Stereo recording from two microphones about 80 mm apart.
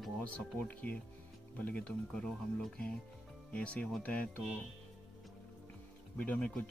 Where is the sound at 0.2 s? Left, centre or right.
Centre.